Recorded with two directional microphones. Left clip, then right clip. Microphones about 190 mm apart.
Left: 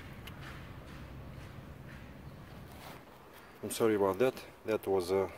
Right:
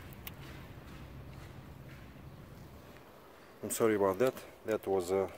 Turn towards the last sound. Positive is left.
turn(degrees=-5)  # may be behind; listen again after turning